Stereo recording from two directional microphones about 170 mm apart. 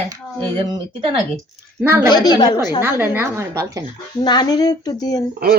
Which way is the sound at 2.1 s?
25° left (ahead or behind).